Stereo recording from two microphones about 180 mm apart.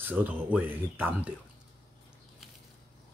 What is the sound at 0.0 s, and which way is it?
Speech, 10° right (ahead or behind).